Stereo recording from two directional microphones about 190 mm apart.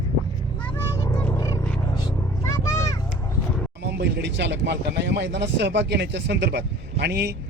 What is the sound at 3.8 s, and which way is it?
Speech, 60° right (ahead or behind).